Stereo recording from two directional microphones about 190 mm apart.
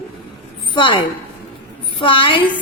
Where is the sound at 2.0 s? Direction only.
25° left (ahead or behind).